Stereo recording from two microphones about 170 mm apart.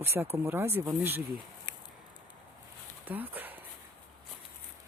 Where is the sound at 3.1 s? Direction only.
10° right (ahead or behind).